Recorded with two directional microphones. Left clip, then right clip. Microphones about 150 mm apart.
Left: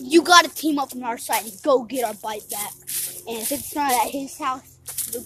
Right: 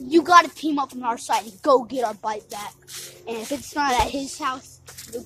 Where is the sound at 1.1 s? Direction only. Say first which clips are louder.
Right 3 dB; 5° left (ahead or behind).